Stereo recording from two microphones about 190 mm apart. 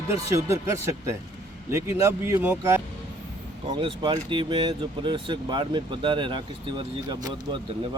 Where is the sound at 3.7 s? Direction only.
25° right (ahead or behind).